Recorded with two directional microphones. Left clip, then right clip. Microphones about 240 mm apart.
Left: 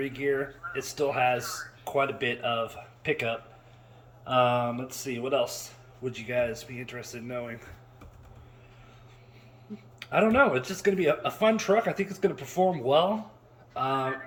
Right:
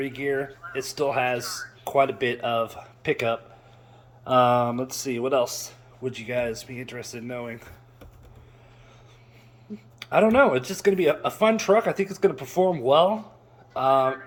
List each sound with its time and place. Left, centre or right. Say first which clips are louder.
0.0 s speech: right 2 dB; centre
10.0 s speech: right 4 dB; centre